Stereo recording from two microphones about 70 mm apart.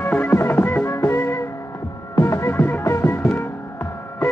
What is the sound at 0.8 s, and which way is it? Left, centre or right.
Music, left.